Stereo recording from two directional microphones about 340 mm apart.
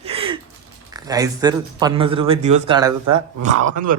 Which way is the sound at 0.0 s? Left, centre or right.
Centre.